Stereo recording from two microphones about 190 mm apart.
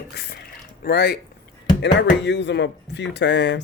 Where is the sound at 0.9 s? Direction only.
55° left (ahead or behind).